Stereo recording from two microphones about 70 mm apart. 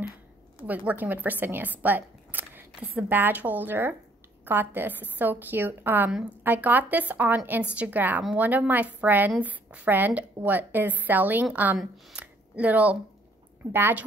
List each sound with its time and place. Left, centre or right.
0.7 s speech: right
13.7 s a woman's voice: right